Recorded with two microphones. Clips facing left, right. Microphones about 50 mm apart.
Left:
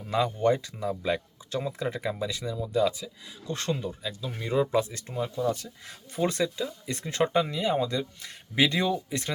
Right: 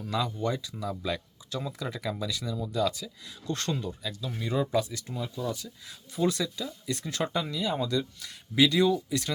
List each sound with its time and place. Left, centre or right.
0.0 s speech: left
0.8 s speech: left